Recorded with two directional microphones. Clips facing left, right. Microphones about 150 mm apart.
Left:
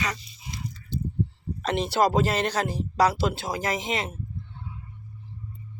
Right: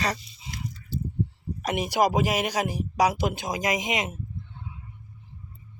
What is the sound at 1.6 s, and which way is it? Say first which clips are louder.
Speech: left 1 dB; 10° right (ahead or behind).